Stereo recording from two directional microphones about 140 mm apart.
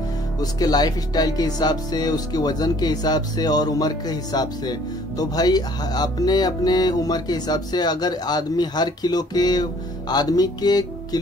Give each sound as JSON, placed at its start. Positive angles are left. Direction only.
{"t": 0.4, "sound": "speech", "side_deg": 25}